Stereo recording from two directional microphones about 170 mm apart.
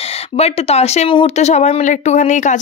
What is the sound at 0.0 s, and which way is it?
Speech, 35° left (ahead or behind).